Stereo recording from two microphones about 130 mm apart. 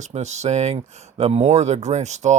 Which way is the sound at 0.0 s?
60° right (ahead or behind).